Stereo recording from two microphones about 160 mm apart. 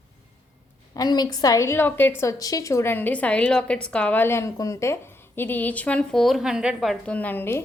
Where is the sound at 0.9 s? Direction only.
25° left (ahead or behind).